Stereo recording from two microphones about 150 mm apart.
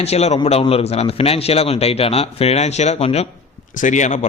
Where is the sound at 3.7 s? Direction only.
55° left (ahead or behind).